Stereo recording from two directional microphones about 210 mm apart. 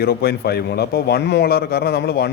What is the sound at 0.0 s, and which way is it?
A man's voice, 50° left (ahead or behind).